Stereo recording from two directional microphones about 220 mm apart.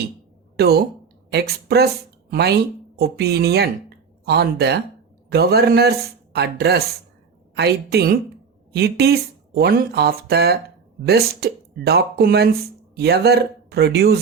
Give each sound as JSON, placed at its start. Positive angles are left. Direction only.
{"t": 0.5, "sound": "speech", "side_deg": -45}